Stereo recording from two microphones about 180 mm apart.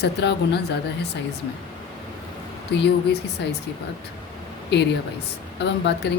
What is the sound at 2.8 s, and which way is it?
Speech, 70° left (ahead or behind).